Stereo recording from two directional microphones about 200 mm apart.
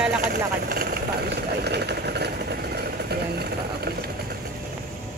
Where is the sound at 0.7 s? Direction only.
50° right (ahead or behind).